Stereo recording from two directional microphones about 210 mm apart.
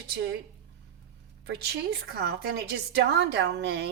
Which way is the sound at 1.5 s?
50° right (ahead or behind).